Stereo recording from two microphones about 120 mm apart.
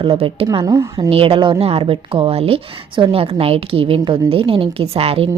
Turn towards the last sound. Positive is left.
turn(degrees=-55)  # may be behind; listen again after turning